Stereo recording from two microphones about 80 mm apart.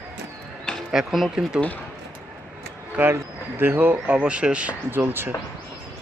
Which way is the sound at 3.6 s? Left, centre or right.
Right.